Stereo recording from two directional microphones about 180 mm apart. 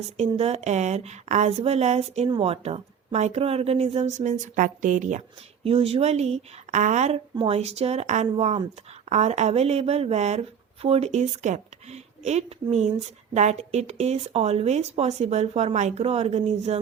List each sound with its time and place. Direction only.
0.2 s a woman's voice: 35° right (ahead or behind)
5.6 s a woman's voice: 30° right (ahead or behind)